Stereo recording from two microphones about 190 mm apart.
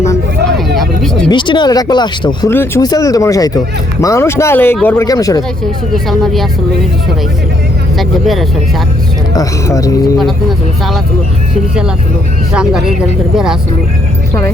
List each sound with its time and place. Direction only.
0.8 s vehicle: centre (ahead or behind)
1.3 s speech: 25° left (ahead or behind)
2.5 s speech: 10° left (ahead or behind)
5.9 s speech: centre (ahead or behind)
7.9 s speech: centre (ahead or behind)
9.3 s speech: 20° left (ahead or behind)
12.5 s speech: 5° right (ahead or behind)